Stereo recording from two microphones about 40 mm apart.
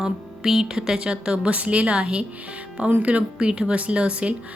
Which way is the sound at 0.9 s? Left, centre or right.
Right.